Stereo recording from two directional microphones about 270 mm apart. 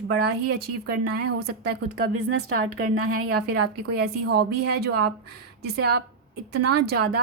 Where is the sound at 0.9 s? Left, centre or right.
Right.